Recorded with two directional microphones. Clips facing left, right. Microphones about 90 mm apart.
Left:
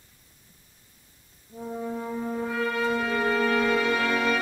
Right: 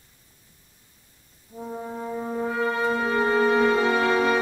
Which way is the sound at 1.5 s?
20° right (ahead or behind).